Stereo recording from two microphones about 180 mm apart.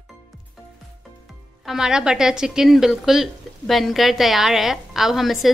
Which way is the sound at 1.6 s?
5° right (ahead or behind).